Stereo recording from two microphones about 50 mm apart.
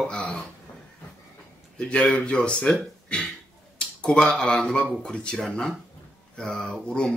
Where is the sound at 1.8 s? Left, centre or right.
Left.